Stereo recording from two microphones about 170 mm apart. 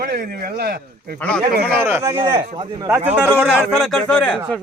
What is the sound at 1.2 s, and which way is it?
Speech, 10° left (ahead or behind).